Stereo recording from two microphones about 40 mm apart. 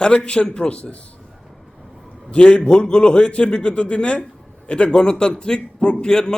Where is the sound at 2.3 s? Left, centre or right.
Left.